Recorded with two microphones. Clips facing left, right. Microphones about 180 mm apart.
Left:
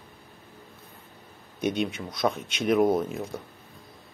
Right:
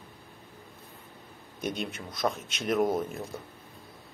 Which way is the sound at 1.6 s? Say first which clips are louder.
Left 6 dB; centre (ahead or behind).